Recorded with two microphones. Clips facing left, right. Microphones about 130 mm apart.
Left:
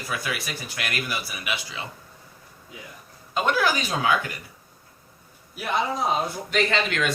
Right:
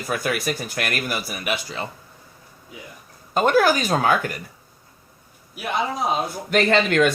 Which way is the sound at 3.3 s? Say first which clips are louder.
Right 6 dB; 45° right (ahead or behind).